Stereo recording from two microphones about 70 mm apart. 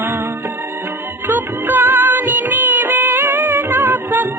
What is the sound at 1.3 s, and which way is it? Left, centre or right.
Music, right.